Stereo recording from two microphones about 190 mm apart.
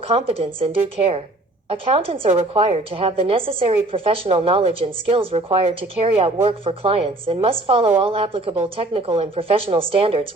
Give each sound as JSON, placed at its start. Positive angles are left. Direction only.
{"t": 0.1, "sound": "speech", "side_deg": -30}
{"t": 1.7, "sound": "speech", "side_deg": -30}